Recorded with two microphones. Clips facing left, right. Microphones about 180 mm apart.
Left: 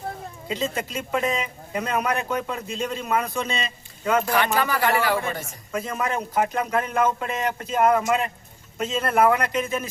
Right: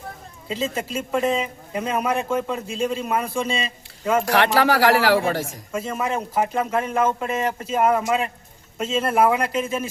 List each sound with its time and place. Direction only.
0.5 s speech: 5° right (ahead or behind)
4.3 s speech: 80° right
5.7 s speech: 5° right (ahead or behind)